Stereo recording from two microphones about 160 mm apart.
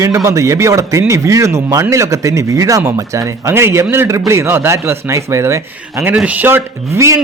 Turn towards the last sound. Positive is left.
turn(degrees=-15)  # may be behind; listen again after turning